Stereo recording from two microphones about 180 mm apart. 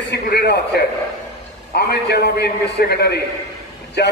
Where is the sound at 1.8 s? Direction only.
65° left (ahead or behind).